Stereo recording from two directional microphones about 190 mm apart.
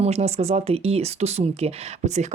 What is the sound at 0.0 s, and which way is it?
Speech, 35° right (ahead or behind).